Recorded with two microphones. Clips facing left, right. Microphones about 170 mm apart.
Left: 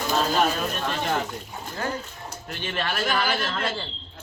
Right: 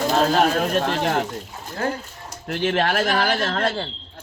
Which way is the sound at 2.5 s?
90° right.